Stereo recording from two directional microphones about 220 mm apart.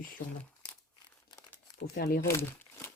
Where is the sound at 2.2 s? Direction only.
10° left (ahead or behind).